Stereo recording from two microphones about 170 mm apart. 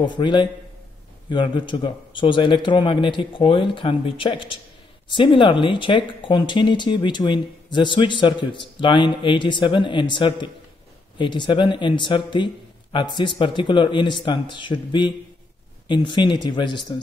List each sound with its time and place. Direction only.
0.0 s speech: 25° left (ahead or behind)